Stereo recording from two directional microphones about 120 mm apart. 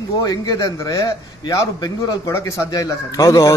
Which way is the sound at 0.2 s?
30° left (ahead or behind).